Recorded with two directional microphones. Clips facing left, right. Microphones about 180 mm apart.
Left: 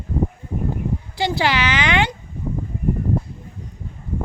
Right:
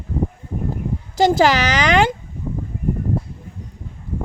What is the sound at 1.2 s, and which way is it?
Speech, 45° right (ahead or behind).